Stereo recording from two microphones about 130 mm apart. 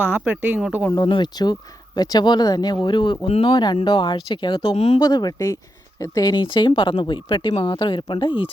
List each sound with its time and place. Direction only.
0.0 s speech: 10° right (ahead or behind)
0.9 s speech: 35° left (ahead or behind)
4.9 s speech: 30° left (ahead or behind)